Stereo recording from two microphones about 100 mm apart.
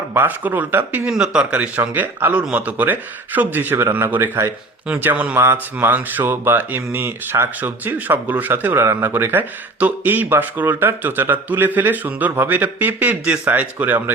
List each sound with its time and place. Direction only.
0.1 s speech: 20° right (ahead or behind)
1.1 s a man's voice: 10° right (ahead or behind)